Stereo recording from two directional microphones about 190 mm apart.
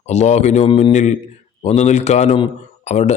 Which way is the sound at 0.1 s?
35° left (ahead or behind).